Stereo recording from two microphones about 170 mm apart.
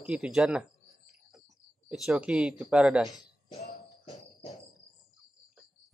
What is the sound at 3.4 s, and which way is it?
Music, 35° left (ahead or behind).